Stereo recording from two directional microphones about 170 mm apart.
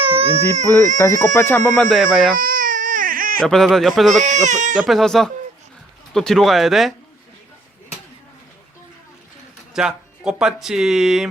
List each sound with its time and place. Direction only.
0.2 s baby cry: 35° right (ahead or behind)
0.5 s speech: 40° right (ahead or behind)
1.2 s speech: 15° left (ahead or behind)
2.0 s speech: 5° right (ahead or behind)
2.4 s baby cry: 55° right (ahead or behind)
3.4 s speech: centre (ahead or behind)
4.4 s speech: 45° right (ahead or behind)
4.8 s speech: centre (ahead or behind)
9.7 s speech: 5° right (ahead or behind)